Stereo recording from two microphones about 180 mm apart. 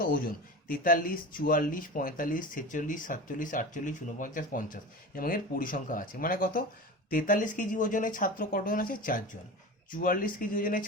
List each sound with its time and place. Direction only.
0.0 s speech: 50° left (ahead or behind)